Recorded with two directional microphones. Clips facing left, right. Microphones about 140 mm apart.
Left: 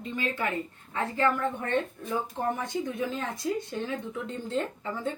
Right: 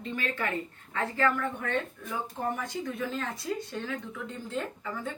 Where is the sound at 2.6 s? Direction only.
20° left (ahead or behind).